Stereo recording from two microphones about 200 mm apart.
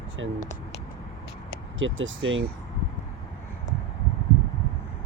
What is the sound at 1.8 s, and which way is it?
Speech, 70° right (ahead or behind).